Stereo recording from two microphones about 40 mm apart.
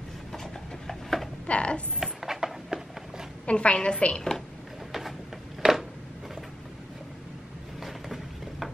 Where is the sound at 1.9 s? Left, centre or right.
Centre.